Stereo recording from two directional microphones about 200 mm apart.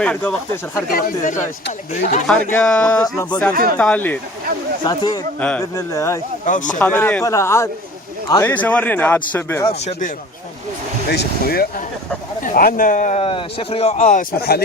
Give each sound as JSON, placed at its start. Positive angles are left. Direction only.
{"t": 0.0, "sound": "speech", "side_deg": 5}
{"t": 0.9, "sound": "speech", "side_deg": 45}
{"t": 2.5, "sound": "a man's voice", "side_deg": 5}
{"t": 3.0, "sound": "a man's voice", "side_deg": 15}
{"t": 3.5, "sound": "speech", "side_deg": -45}
{"t": 3.8, "sound": "a man's voice", "side_deg": 5}
{"t": 4.8, "sound": "a man's voice", "side_deg": 20}
{"t": 6.4, "sound": "speech", "side_deg": 40}
{"t": 6.7, "sound": "a man's voice", "side_deg": 10}
{"t": 9.6, "sound": "speech", "side_deg": 30}
{"t": 11.1, "sound": "speech", "side_deg": 55}
{"t": 14.3, "sound": "speech", "side_deg": 50}